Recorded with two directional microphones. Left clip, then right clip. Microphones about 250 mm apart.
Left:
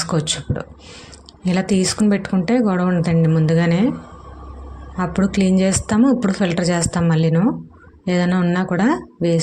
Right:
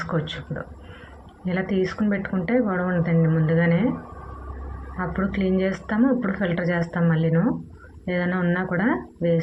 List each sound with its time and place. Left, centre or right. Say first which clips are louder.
0.0 s speech: left 6 dB; left
4.9 s speech: left 6 dB; left